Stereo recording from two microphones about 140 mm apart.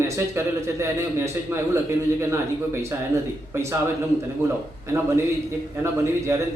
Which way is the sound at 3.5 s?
20° right (ahead or behind).